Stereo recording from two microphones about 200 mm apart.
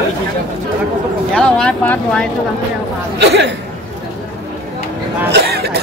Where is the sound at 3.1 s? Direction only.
55° right (ahead or behind).